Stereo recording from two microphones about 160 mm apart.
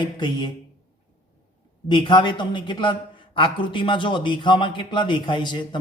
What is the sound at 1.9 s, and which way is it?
A man's voice, 30° left (ahead or behind).